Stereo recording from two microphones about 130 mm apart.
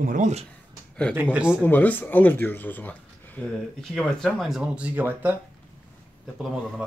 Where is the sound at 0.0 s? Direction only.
90° right.